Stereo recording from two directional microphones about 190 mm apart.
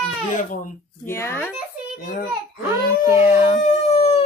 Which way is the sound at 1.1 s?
15° left (ahead or behind).